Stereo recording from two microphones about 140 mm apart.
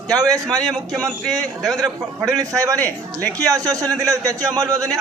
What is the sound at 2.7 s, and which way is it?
Speech, 10° left (ahead or behind).